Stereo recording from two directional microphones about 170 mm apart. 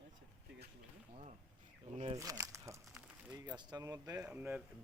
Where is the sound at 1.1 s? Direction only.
40° right (ahead or behind).